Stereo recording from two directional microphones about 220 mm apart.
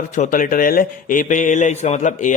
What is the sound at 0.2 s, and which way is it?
Speech, 35° left (ahead or behind).